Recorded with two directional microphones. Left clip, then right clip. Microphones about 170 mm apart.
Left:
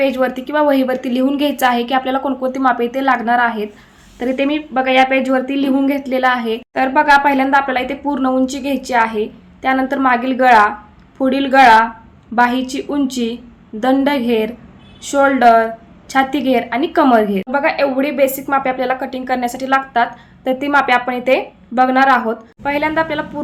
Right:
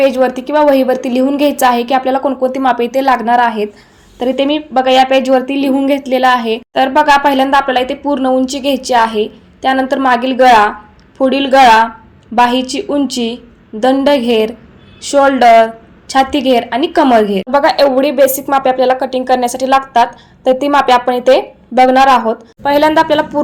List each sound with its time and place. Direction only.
0.0 s a woman's voice: 15° right (ahead or behind)